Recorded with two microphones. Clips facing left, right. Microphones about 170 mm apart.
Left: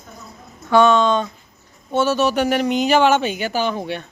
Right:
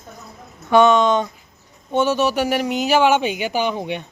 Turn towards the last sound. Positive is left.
turn(degrees=-15)  # may be behind; listen again after turning